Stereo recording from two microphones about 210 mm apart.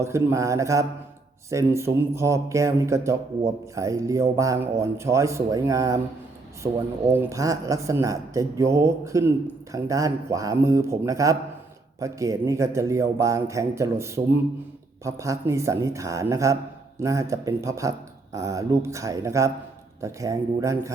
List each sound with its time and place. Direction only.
0.0 s speech: 15° right (ahead or behind)
7.1 s speech: 10° right (ahead or behind)